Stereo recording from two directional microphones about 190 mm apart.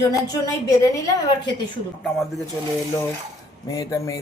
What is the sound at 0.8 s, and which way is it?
Speech, 20° left (ahead or behind).